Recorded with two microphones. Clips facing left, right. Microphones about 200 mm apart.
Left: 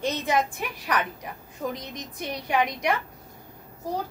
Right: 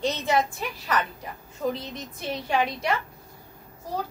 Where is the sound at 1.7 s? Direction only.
15° left (ahead or behind).